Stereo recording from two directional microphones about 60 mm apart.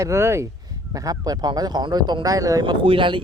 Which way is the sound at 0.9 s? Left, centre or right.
Right.